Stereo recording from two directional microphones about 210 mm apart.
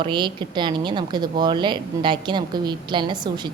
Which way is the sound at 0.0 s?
20° right (ahead or behind).